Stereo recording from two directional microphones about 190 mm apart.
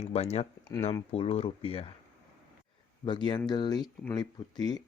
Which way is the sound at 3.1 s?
25° left (ahead or behind).